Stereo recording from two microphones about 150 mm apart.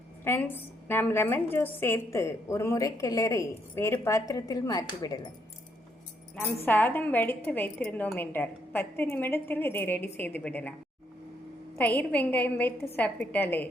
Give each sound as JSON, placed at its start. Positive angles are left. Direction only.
{"t": 0.3, "sound": "a woman's voice", "side_deg": 15}
{"t": 6.7, "sound": "a woman's voice", "side_deg": 15}
{"t": 11.8, "sound": "a woman's voice", "side_deg": 10}